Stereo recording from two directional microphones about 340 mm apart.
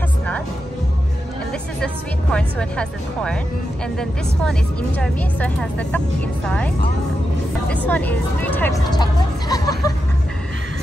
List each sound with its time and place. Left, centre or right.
2.3 s a woman's voice: centre
7.6 s vehicle: centre